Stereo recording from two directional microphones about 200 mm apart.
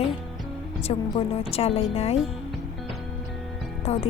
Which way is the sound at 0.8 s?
30° left (ahead or behind).